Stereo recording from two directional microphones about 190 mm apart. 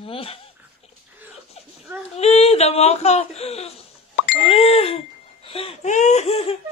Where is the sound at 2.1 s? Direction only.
35° left (ahead or behind).